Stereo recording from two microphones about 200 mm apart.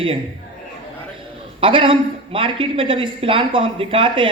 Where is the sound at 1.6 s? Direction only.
25° right (ahead or behind).